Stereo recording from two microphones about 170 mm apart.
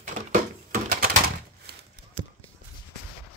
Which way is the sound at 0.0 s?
55° right (ahead or behind).